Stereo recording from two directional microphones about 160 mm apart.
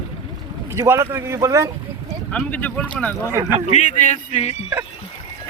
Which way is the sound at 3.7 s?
50° left (ahead or behind).